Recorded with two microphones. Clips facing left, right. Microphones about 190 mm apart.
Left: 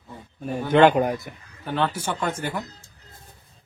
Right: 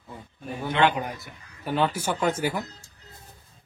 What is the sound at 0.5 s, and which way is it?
Speech, 45° left (ahead or behind).